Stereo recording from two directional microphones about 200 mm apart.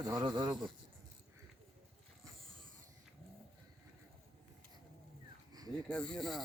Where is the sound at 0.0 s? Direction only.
20° right (ahead or behind).